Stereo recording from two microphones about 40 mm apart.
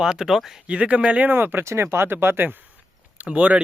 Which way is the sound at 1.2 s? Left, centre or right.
Right.